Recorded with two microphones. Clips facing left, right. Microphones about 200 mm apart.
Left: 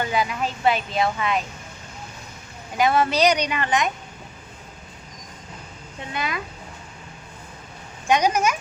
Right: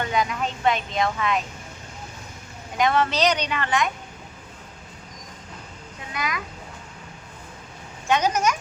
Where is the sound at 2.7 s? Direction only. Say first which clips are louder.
Left 2 dB; 10° left (ahead or behind).